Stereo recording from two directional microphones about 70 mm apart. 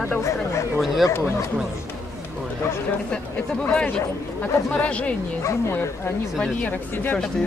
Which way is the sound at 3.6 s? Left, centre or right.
Centre.